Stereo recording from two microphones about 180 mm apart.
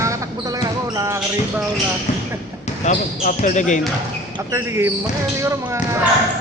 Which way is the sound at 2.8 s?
45° left (ahead or behind).